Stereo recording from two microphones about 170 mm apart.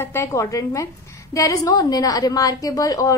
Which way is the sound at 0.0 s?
15° left (ahead or behind).